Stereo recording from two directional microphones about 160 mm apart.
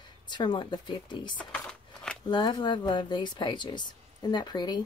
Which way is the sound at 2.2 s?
25° left (ahead or behind).